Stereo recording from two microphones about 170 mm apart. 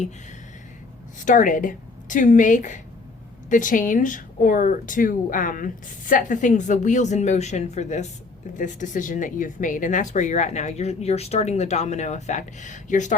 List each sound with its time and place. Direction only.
1.2 s speech: 50° left (ahead or behind)